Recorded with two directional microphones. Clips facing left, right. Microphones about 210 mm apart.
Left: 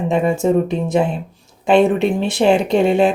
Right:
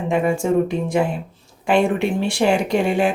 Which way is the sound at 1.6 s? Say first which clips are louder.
Left 4 dB; 20° left (ahead or behind).